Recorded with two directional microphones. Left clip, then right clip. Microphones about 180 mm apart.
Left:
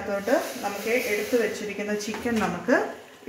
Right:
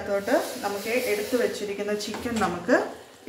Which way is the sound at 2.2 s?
40° left (ahead or behind).